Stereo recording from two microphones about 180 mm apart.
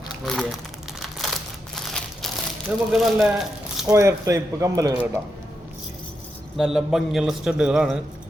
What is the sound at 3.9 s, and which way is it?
Speech, 15° right (ahead or behind).